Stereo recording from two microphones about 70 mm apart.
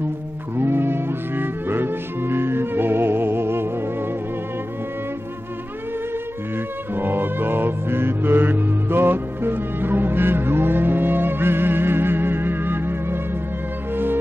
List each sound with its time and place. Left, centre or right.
0.6 s music: right
6.5 s music: right